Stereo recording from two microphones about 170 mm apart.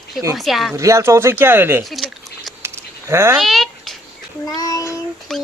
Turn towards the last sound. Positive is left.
turn(degrees=5)  # may be behind; listen again after turning